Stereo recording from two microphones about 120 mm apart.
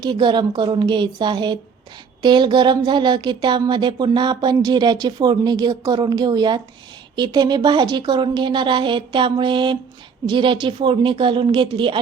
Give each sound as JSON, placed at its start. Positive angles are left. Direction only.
{"t": 0.0, "sound": "a woman's voice", "side_deg": -40}